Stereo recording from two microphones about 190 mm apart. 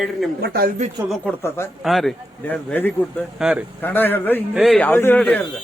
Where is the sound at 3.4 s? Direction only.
5° right (ahead or behind).